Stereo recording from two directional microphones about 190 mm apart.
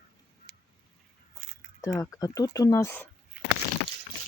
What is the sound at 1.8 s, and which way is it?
Speech, 15° left (ahead or behind).